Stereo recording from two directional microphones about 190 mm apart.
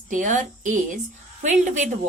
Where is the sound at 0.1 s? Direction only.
45° right (ahead or behind).